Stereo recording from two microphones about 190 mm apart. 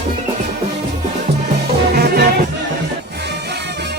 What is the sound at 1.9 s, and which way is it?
Music, 55° right (ahead or behind).